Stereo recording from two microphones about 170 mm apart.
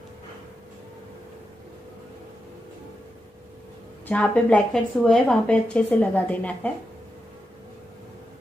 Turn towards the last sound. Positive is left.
turn(degrees=10)  # may be behind; listen again after turning